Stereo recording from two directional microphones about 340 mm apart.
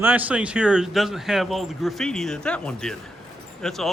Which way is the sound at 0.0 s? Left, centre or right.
Centre.